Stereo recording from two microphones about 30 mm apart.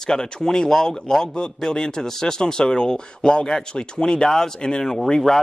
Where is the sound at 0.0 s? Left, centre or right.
Left.